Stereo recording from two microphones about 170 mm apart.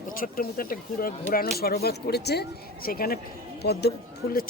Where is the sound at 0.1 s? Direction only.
60° left (ahead or behind).